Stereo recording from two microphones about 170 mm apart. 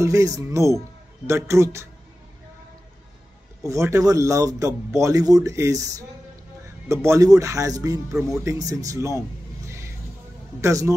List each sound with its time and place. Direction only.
0.0 s speech: 20° right (ahead or behind)
3.6 s speech: 15° right (ahead or behind)
10.6 s speech: 20° right (ahead or behind)